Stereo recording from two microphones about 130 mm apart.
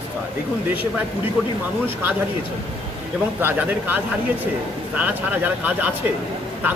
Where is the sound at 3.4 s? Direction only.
15° right (ahead or behind).